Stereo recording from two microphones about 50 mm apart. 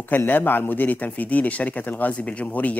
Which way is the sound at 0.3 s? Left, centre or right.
Left.